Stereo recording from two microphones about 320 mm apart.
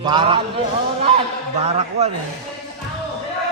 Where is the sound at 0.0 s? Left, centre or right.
Centre.